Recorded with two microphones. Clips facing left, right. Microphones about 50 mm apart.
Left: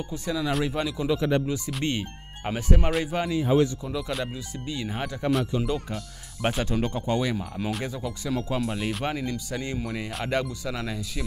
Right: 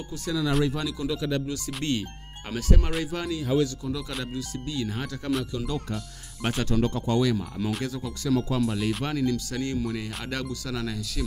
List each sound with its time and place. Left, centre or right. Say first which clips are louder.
0.1 s speech: right 2 dB; left
8.5 s speech: right 2 dB; centre
9.0 s speech: right 2 dB; left